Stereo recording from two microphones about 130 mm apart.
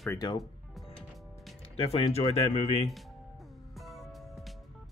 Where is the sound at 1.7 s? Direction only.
45° left (ahead or behind).